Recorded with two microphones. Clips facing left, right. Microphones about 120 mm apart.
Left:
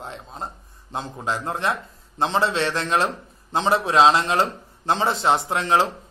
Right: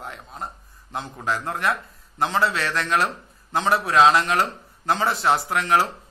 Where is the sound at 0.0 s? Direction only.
25° left (ahead or behind).